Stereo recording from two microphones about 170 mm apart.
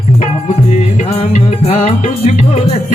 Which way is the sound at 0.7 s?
40° left (ahead or behind).